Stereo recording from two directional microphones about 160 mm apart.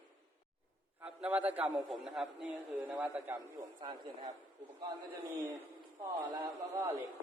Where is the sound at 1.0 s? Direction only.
10° right (ahead or behind).